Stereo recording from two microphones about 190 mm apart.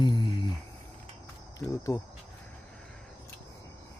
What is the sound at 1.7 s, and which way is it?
Speech, 15° left (ahead or behind).